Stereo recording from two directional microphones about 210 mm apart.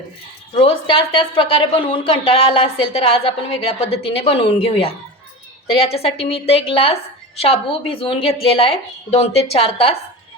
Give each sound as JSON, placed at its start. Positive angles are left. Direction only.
{"t": 0.5, "sound": "a woman's voice", "side_deg": 30}